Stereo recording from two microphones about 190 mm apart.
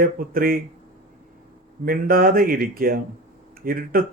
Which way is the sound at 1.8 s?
50° right (ahead or behind).